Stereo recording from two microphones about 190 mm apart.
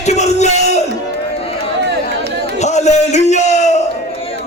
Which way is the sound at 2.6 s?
35° left (ahead or behind).